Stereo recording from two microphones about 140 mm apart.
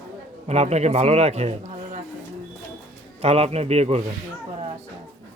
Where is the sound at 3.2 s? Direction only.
50° right (ahead or behind).